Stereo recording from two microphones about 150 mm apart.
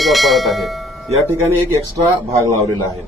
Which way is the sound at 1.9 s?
25° right (ahead or behind).